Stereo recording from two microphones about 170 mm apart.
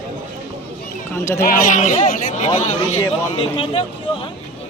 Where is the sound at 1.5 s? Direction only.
50° left (ahead or behind); by 3.8 s 30° left (ahead or behind).